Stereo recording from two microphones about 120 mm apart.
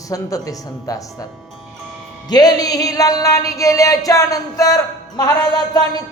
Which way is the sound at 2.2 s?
35° left (ahead or behind).